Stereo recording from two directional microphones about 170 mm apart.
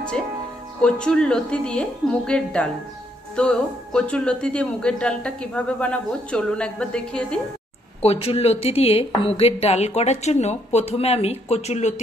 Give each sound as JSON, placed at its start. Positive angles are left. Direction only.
{"t": 0.8, "sound": "speech", "side_deg": 5}
{"t": 8.0, "sound": "speech", "side_deg": 35}